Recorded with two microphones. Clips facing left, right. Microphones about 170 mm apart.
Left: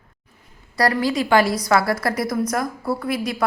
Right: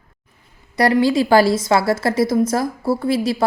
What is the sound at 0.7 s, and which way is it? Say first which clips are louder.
A woman's voice: right 5 dB; 25° right (ahead or behind).